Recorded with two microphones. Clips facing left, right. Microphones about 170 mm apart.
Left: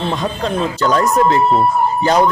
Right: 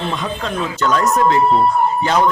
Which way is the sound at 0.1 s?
35° left (ahead or behind).